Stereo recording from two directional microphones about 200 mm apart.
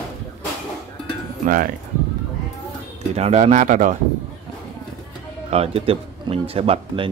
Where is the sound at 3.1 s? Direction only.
35° right (ahead or behind).